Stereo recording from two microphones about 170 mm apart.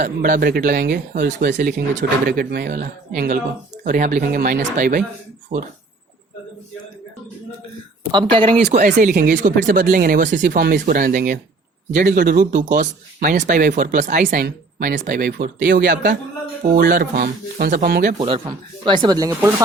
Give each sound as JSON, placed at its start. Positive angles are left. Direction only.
{"t": 0.0, "sound": "speech", "side_deg": -55}
{"t": 8.1, "sound": "speech", "side_deg": -30}
{"t": 8.7, "sound": "speech", "side_deg": -50}
{"t": 14.4, "sound": "speech", "side_deg": -65}
{"t": 18.2, "sound": "speech", "side_deg": -35}